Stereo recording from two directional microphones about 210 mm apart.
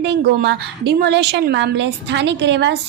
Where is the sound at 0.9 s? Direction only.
50° right (ahead or behind).